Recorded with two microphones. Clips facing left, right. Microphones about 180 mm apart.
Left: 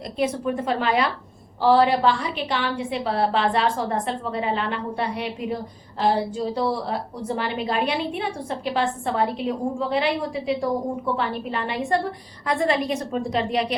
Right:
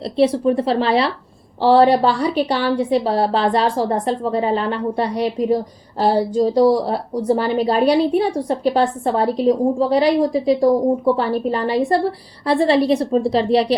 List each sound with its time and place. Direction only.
0.0 s a woman's voice: 35° right (ahead or behind)